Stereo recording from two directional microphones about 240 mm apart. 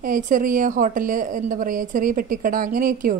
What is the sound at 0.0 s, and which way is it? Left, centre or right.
A woman's voice, right.